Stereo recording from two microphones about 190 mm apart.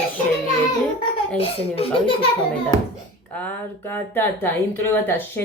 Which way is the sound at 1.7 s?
30° left (ahead or behind).